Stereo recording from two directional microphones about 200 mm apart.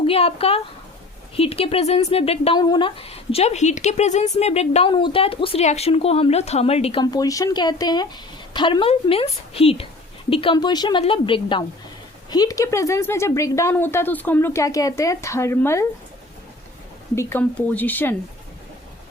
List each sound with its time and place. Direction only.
0.0 s a woman's voice: 30° left (ahead or behind)
7.0 s a woman's voice: 20° left (ahead or behind)
17.2 s speech: 10° left (ahead or behind)